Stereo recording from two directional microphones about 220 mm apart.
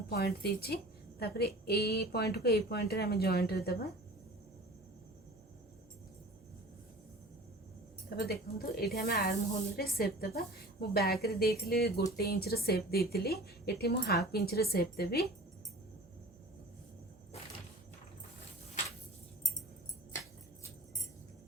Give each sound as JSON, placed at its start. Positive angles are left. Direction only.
{"t": 0.1, "sound": "a woman's voice", "side_deg": 45}
{"t": 8.1, "sound": "a woman's voice", "side_deg": 45}